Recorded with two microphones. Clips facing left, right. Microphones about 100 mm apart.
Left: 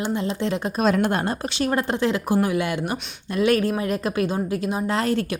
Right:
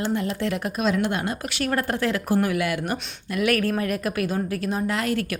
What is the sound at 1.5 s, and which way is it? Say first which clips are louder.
A woman's voice: left 1 dB; 20° left (ahead or behind).